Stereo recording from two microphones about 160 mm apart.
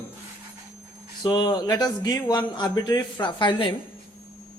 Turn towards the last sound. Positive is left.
turn(degrees=30)  # may be behind; listen again after turning